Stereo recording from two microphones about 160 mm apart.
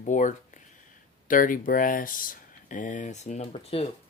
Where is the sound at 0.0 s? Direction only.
50° left (ahead or behind).